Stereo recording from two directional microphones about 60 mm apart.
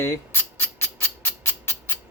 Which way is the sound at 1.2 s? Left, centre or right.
Left.